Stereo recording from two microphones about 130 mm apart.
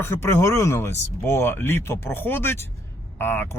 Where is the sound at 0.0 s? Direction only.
20° left (ahead or behind).